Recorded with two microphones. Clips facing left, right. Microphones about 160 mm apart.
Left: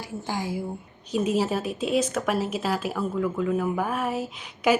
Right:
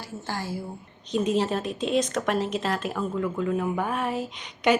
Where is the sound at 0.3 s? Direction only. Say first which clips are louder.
Left 3 dB; 15° left (ahead or behind).